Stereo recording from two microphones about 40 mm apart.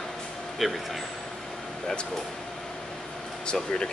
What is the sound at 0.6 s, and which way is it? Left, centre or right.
Speech, centre.